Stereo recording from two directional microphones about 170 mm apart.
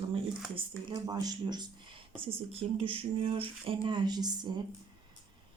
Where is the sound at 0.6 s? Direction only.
25° right (ahead or behind).